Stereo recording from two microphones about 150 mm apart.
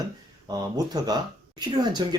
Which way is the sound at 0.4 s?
25° right (ahead or behind).